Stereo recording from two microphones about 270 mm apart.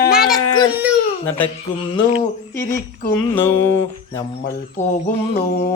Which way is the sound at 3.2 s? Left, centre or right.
Centre.